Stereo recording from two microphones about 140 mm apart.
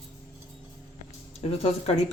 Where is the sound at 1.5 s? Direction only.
45° left (ahead or behind).